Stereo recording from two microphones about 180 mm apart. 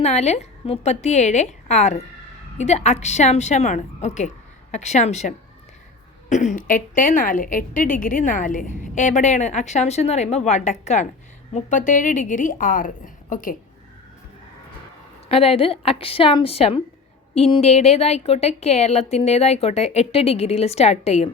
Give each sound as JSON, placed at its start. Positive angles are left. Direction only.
{"t": 0.0, "sound": "a woman's voice", "side_deg": 35}
{"t": 15.3, "sound": "speech", "side_deg": 30}